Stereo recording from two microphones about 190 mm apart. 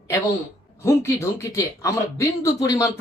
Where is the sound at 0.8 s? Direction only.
15° left (ahead or behind).